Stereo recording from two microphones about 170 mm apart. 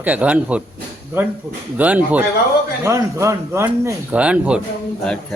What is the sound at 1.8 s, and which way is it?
Speech, 10° right (ahead or behind).